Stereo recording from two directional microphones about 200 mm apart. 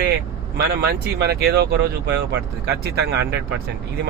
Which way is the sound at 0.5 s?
55° right (ahead or behind).